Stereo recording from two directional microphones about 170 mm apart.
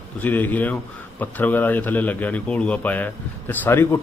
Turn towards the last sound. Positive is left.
turn(degrees=15)  # may be behind; listen again after turning